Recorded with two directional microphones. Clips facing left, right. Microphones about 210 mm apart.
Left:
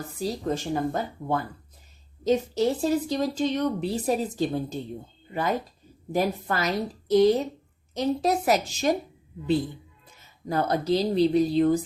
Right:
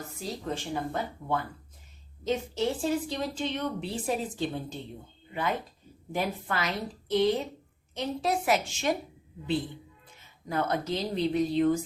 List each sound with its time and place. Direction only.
0.2 s a woman's voice: 40° left (ahead or behind)
2.2 s a woman's voice: 40° left (ahead or behind)
10.2 s a woman's voice: 35° left (ahead or behind)